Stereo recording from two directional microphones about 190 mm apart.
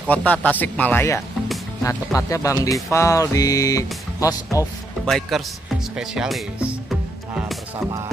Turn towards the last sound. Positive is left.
turn(degrees=0)  # may be behind; listen again after turning